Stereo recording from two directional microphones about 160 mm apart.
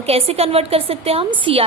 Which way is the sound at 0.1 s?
40° right (ahead or behind).